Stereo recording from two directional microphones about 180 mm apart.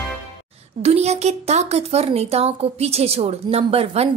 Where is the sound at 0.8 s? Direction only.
35° right (ahead or behind).